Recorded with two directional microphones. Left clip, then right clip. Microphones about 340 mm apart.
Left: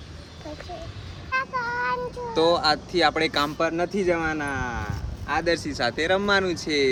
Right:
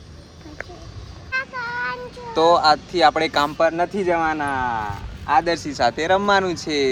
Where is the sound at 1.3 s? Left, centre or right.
Centre.